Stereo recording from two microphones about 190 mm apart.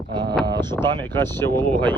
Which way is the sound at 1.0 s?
10° left (ahead or behind).